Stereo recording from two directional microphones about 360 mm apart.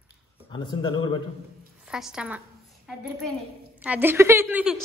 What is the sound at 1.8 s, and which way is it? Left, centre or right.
Speech, centre.